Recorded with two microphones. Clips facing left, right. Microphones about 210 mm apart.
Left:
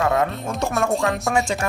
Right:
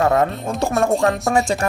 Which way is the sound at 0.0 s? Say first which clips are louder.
Right 3 dB; 40° right (ahead or behind).